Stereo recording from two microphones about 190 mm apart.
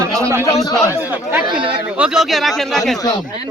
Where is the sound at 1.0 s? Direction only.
10° right (ahead or behind).